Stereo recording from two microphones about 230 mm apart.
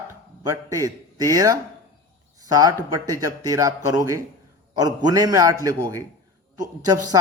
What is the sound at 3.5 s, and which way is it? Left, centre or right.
Speech, centre.